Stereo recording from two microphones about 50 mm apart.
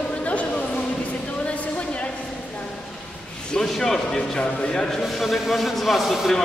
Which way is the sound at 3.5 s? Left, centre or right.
Centre.